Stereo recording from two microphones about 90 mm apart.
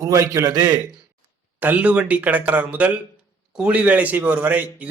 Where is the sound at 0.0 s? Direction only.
35° right (ahead or behind).